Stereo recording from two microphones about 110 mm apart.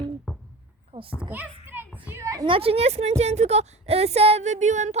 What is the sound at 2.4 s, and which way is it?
A woman's voice, 60° right (ahead or behind).